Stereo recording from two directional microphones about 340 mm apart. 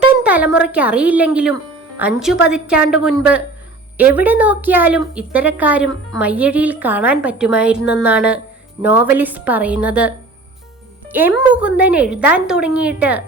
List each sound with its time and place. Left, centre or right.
0.2 s a woman's voice: centre